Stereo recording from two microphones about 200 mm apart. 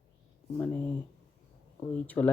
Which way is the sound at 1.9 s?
5° left (ahead or behind).